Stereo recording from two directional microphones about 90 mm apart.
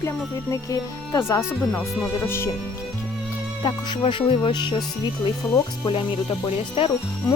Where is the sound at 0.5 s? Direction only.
35° left (ahead or behind).